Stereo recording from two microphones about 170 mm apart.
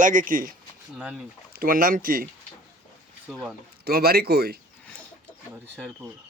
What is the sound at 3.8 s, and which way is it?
Speech, 65° right (ahead or behind).